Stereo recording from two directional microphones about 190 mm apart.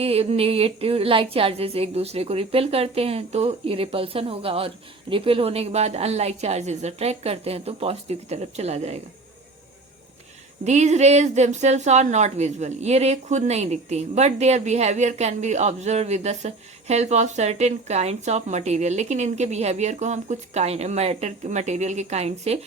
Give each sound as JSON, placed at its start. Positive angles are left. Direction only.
{"t": 0.0, "sound": "a woman's voice", "side_deg": -30}
{"t": 10.6, "sound": "a woman's voice", "side_deg": -35}